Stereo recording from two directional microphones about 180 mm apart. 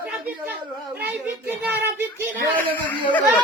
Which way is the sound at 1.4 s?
10° right (ahead or behind).